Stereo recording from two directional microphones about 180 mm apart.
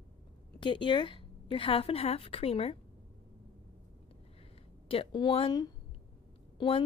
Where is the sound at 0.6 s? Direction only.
25° left (ahead or behind).